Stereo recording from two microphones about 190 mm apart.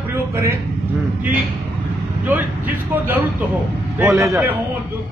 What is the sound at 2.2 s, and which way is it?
A man's voice, 10° right (ahead or behind).